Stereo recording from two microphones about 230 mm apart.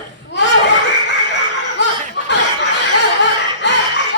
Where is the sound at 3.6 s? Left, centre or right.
Left.